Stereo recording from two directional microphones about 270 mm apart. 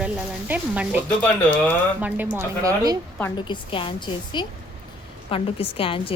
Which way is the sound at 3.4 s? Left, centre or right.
Centre.